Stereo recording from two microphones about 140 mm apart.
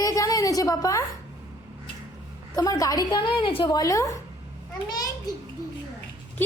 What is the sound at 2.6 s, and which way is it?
A woman's voice, 25° left (ahead or behind).